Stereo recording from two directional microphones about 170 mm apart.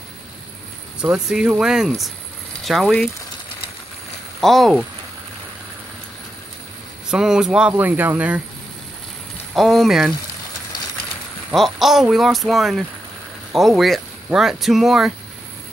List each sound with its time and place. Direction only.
1.0 s speech: 5° right (ahead or behind)
4.4 s speech: centre (ahead or behind)
7.1 s speech: 5° right (ahead or behind)
9.6 s speech: centre (ahead or behind)
11.5 s speech: centre (ahead or behind)